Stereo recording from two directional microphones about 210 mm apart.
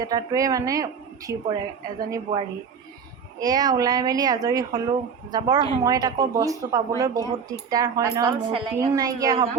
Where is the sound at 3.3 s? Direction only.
20° right (ahead or behind).